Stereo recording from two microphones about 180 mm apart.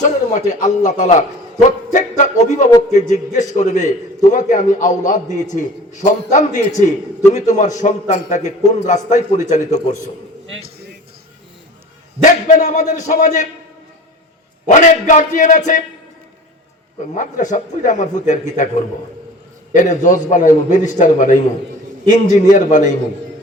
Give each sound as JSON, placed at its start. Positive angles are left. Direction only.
{"t": 0.6, "sound": "a man's voice", "side_deg": 40}
{"t": 12.2, "sound": "a man's voice", "side_deg": 40}
{"t": 14.7, "sound": "a man's voice", "side_deg": 45}
{"t": 17.2, "sound": "a man's voice", "side_deg": 45}
{"t": 19.7, "sound": "a man's voice", "side_deg": 45}